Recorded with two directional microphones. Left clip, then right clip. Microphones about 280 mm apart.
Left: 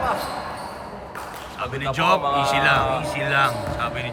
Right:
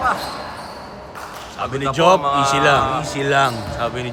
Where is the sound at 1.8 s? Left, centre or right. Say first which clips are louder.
Right 5 dB; centre.